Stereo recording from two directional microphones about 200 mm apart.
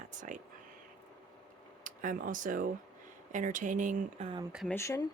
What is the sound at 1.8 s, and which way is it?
Speech, 40° right (ahead or behind).